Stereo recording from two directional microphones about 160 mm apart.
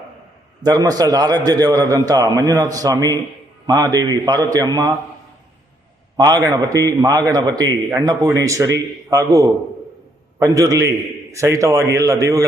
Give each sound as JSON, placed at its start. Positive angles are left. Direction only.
{"t": 0.6, "sound": "a man's voice", "side_deg": -25}
{"t": 6.1, "sound": "a man's voice", "side_deg": -25}